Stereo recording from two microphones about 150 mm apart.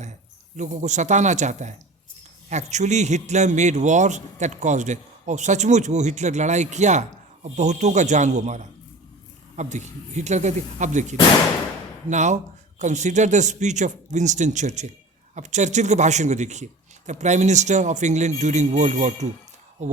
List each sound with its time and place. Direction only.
0.5 s a man's voice: 55° right (ahead or behind)